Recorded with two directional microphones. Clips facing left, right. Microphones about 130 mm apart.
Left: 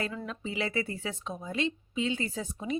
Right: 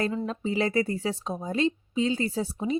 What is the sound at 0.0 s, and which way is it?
A woman's voice, 30° right (ahead or behind).